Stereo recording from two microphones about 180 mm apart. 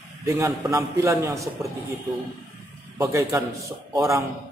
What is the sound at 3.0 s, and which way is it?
A man's voice, 15° right (ahead or behind).